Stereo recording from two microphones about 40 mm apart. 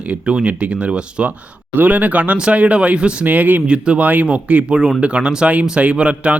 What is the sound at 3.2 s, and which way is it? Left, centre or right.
Speech, right.